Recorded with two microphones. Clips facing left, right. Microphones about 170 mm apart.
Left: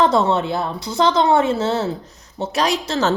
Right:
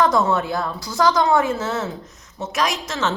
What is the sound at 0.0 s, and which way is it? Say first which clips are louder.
A woman's voice: left 2 dB; 30° left (ahead or behind).